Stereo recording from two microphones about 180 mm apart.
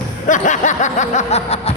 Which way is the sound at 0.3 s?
45° left (ahead or behind).